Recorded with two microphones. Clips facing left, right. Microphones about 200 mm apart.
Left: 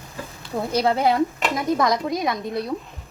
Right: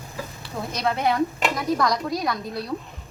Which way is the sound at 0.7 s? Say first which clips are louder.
Left 4 dB; 30° left (ahead or behind).